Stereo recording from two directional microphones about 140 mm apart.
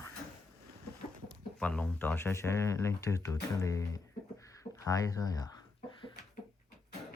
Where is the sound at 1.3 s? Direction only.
5° left (ahead or behind); by 6.1 s 25° left (ahead or behind).